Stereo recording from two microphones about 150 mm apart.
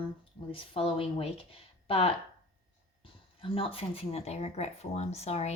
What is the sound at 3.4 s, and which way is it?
Speech, 35° left (ahead or behind).